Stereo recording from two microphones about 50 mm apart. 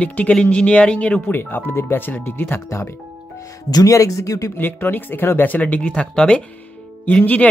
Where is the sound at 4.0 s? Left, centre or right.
Left.